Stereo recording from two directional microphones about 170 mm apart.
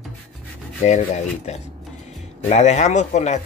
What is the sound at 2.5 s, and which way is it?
Speech, 45° left (ahead or behind).